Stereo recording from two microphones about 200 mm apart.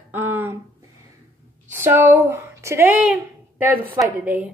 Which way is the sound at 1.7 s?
10° right (ahead or behind).